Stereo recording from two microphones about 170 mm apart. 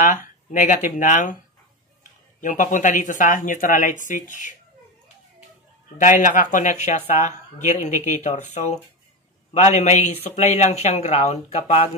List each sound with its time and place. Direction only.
0.0 s speech: 50° left (ahead or behind)
2.4 s speech: 50° left (ahead or behind)
5.9 s speech: 50° left (ahead or behind)
9.5 s speech: 40° left (ahead or behind)